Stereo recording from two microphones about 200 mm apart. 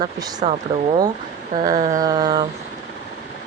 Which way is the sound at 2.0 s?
20° right (ahead or behind).